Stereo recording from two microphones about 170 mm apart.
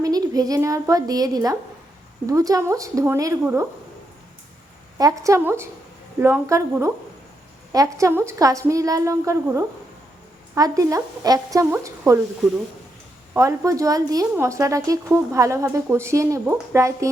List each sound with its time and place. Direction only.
0.0 s a woman's voice: 20° right (ahead or behind)
4.9 s a woman's voice: 20° right (ahead or behind)
7.9 s a woman's voice: 15° right (ahead or behind)
13.3 s a woman's voice: 20° right (ahead or behind)